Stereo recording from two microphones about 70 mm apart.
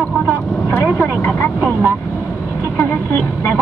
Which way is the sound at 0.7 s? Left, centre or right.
Centre.